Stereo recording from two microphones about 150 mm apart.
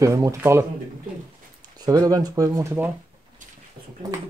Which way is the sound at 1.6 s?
25° right (ahead or behind).